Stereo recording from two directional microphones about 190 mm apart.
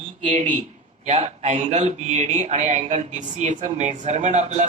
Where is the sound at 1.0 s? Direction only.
35° right (ahead or behind).